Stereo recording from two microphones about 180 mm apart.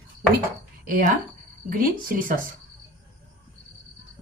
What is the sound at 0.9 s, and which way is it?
Speech, 50° right (ahead or behind).